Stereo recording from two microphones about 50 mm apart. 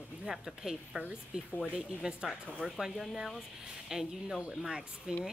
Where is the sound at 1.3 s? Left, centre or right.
Centre.